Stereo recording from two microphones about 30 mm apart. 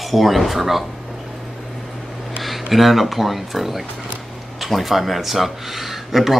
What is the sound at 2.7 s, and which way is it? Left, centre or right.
Speech, centre.